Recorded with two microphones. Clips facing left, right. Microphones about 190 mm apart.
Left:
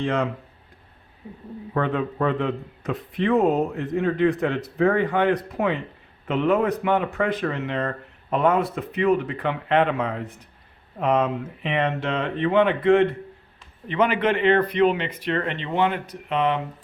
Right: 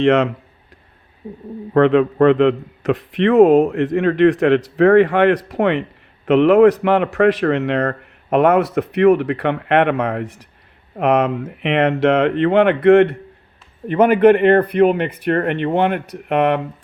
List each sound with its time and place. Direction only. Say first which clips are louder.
0.0 s speech: right 10 dB; 80° right
1.7 s speech: right 11 dB; 75° right (ahead or behind)
13.8 s speech: right 10 dB; 55° right (ahead or behind)